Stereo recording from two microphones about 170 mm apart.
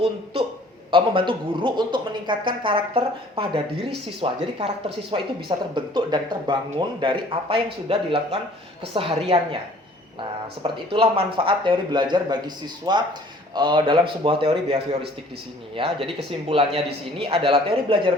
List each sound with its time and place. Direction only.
0.9 s speech: 30° right (ahead or behind)